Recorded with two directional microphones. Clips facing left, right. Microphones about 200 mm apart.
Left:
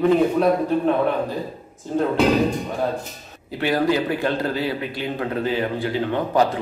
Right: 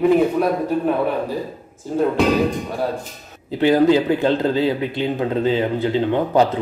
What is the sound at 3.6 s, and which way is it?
A man's voice, 20° right (ahead or behind).